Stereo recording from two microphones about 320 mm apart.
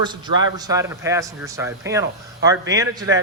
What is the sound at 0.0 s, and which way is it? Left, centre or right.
A man's voice, centre.